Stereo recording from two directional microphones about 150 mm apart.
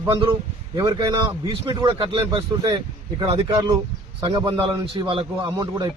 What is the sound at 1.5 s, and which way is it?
Speech, 30° right (ahead or behind).